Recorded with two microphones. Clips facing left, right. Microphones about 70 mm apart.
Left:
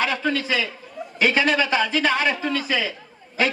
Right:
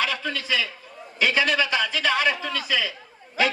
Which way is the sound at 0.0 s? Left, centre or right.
Left.